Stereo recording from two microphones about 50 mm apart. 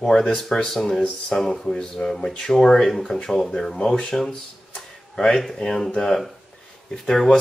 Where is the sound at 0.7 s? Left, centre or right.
Centre.